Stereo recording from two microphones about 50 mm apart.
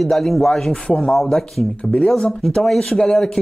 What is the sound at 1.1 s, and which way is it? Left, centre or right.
Speech, centre.